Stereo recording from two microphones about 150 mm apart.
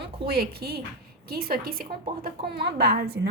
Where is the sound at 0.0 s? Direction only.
90° right.